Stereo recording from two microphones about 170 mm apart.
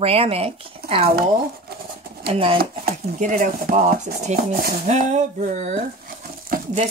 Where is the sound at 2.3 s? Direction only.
30° right (ahead or behind).